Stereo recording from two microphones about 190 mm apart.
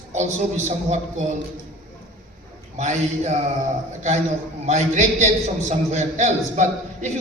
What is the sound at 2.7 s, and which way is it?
Speech, 40° right (ahead or behind).